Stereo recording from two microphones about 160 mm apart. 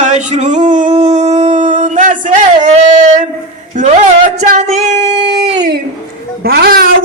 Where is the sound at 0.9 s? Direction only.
40° right (ahead or behind).